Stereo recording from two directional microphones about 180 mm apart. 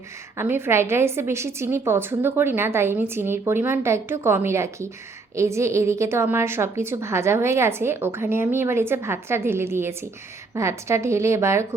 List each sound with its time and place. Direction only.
0.3 s a woman's voice: 15° right (ahead or behind)